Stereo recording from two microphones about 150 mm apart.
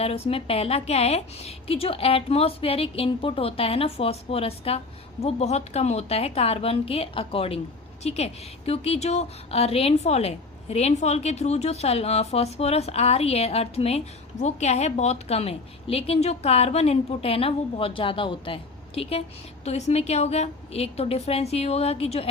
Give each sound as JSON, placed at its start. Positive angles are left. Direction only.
{"t": 0.0, "sound": "a woman's voice", "side_deg": 40}